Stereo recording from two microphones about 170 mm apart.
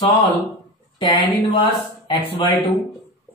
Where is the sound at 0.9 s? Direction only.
25° left (ahead or behind).